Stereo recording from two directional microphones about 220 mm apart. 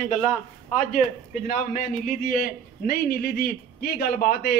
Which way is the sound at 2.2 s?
40° left (ahead or behind).